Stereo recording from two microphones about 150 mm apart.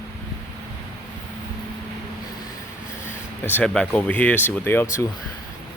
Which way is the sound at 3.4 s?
10° left (ahead or behind).